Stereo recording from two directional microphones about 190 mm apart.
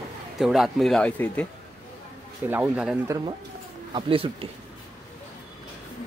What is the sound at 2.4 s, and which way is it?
Speech, 10° right (ahead or behind).